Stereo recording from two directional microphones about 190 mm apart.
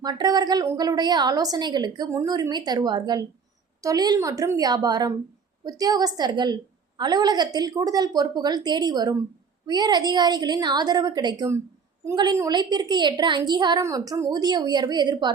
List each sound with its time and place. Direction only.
0.0 s a woman's voice: 20° right (ahead or behind)